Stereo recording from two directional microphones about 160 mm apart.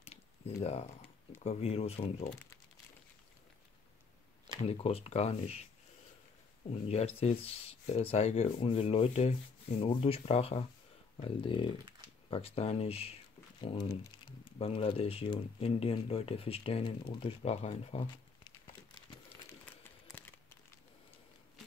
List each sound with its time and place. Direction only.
0.6 s speech: 40° left (ahead or behind)
4.6 s speech: 35° left (ahead or behind)
6.7 s speech: 40° left (ahead or behind)
19.2 s crumpling: 10° left (ahead or behind)